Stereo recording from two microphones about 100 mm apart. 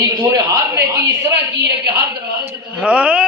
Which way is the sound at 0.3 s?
30° right (ahead or behind).